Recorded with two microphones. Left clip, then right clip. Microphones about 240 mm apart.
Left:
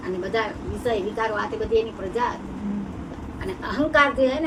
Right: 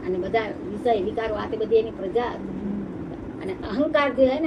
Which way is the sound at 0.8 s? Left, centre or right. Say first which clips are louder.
Right 1 dB; centre.